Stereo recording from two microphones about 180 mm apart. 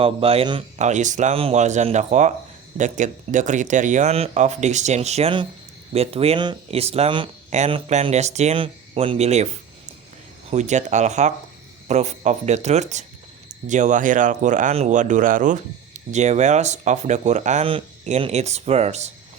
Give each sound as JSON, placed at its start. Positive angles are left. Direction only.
{"t": 0.0, "sound": "speech", "side_deg": -30}
{"t": 0.8, "sound": "speech", "side_deg": -40}
{"t": 10.5, "sound": "speech", "side_deg": -40}